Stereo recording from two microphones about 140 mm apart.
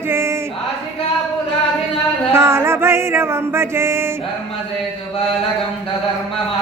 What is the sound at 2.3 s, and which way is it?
Music, 20° right (ahead or behind).